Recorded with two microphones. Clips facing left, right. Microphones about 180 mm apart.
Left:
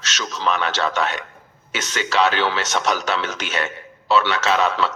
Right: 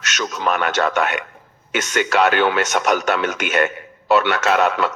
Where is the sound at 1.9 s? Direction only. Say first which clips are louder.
Right 3 dB; 55° right (ahead or behind).